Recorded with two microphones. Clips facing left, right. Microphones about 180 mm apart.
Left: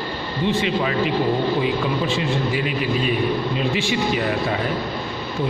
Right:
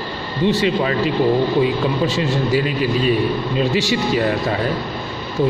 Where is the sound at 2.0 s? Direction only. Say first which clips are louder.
Right 3 dB; 40° right (ahead or behind).